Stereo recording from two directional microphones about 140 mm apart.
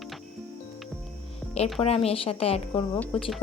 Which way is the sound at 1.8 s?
45° left (ahead or behind).